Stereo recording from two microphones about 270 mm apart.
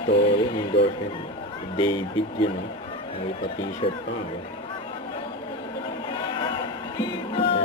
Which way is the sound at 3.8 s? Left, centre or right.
Left.